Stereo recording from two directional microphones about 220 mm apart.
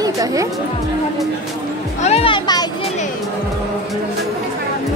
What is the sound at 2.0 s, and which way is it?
Speech, 25° left (ahead or behind).